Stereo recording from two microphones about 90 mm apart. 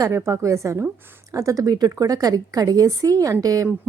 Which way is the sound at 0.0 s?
35° right (ahead or behind).